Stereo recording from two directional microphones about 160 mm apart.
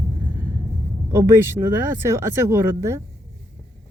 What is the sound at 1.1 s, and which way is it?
Speech, 15° right (ahead or behind).